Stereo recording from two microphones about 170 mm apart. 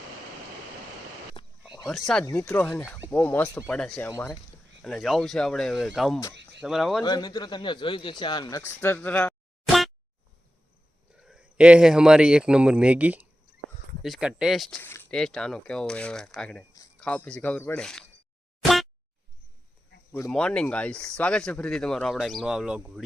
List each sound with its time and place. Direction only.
1.4 s a sound: 25° left (ahead or behind)
1.8 s speech: centre (ahead or behind)
2.2 s speech: 15° left (ahead or behind)
4.1 s speech: 15° left (ahead or behind)
4.8 s speech: centre (ahead or behind)
7.0 s a man's voice: 25° left (ahead or behind)
11.2 s speech: 5° right (ahead or behind)
14.8 s speech: 10° left (ahead or behind)
18.6 s boing: centre (ahead or behind)
20.3 s speech: 5° left (ahead or behind)